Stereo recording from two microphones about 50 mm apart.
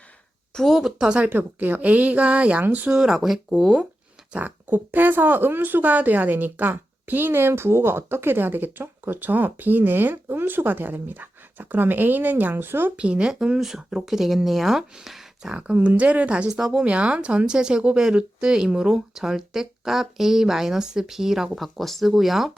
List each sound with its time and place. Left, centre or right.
0.5 s speech: centre
0.8 s speech: centre
1.3 s speech: right
2.9 s speech: centre
4.3 s speech: right
13.0 s speech: centre
15.5 s a woman's voice: right
16.6 s speech: centre
16.8 s speech: right; by 22.5 s centre